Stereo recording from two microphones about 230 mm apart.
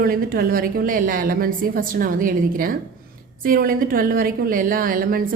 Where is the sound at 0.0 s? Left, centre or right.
Right.